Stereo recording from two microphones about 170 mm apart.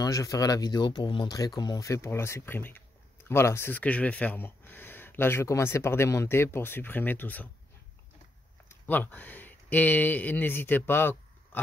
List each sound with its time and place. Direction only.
0.0 s speech: 20° left (ahead or behind)
8.6 s speech: 10° left (ahead or behind)